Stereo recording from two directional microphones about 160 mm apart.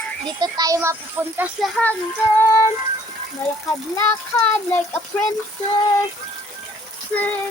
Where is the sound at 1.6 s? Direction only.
5° left (ahead or behind).